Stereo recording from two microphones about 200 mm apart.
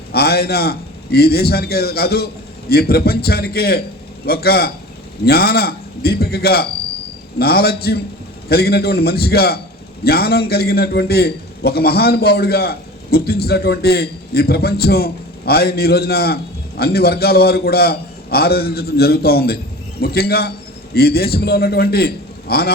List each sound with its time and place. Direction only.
0.1 s a man's voice: 50° left (ahead or behind)